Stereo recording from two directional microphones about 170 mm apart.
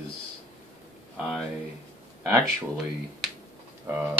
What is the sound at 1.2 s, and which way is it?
Speech, centre (ahead or behind).